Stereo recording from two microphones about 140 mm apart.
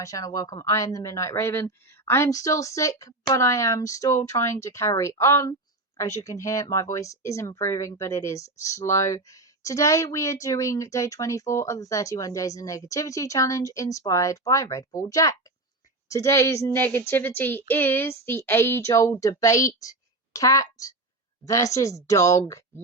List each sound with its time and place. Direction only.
0.0 s a woman's voice: 25° left (ahead or behind)